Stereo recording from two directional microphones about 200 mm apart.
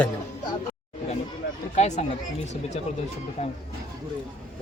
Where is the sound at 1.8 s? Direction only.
35° left (ahead or behind).